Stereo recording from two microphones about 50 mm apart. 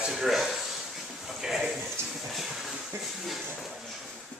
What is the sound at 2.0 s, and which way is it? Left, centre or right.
Train, right.